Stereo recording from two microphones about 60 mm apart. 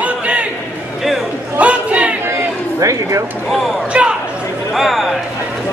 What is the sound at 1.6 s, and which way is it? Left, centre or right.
Crowd, right.